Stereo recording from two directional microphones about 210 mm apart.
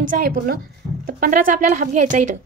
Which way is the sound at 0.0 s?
40° right (ahead or behind).